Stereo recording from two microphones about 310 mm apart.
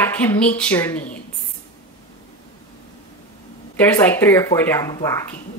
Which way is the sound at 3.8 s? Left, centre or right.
Centre.